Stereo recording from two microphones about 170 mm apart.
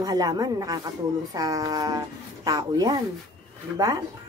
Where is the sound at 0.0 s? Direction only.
20° right (ahead or behind).